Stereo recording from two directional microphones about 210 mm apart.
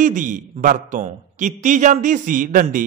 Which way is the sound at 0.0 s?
40° right (ahead or behind).